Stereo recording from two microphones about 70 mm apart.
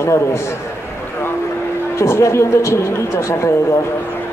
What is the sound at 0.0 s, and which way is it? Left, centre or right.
Speech, left.